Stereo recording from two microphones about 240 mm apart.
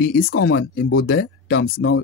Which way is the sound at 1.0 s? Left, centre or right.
Left.